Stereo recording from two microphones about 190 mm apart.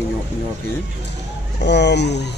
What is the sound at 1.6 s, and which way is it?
Speech, 65° left (ahead or behind).